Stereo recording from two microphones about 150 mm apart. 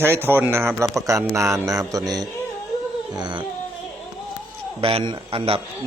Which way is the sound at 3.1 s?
30° right (ahead or behind).